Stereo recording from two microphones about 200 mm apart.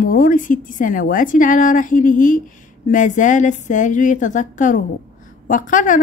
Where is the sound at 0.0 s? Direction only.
45° left (ahead or behind).